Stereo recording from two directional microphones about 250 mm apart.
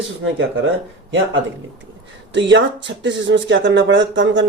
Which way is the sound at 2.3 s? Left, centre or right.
Right.